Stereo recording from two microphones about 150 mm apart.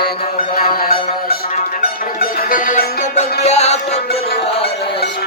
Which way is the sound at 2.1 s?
65° left (ahead or behind).